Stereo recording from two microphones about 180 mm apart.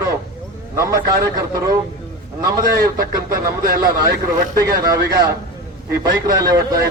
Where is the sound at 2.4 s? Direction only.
20° right (ahead or behind).